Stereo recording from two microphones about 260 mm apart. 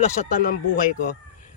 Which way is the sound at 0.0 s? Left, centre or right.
Left.